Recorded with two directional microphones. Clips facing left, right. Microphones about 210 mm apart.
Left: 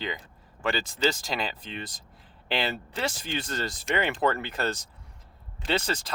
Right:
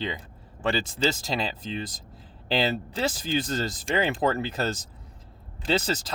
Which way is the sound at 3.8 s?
30° right (ahead or behind).